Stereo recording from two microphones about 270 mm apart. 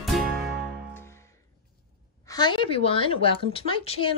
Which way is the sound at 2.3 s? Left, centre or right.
Centre.